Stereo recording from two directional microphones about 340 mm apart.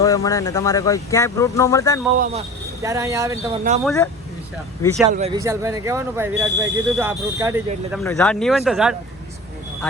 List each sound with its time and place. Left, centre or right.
0.0 s speech: centre
2.1 s speech: right
2.8 s speech: centre
3.8 s speech: centre
5.1 s speech: centre
8.0 s speech: centre